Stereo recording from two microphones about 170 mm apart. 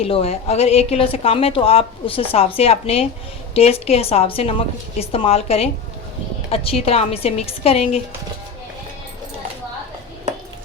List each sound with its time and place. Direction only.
0.0 s a woman's voice: 35° left (ahead or behind)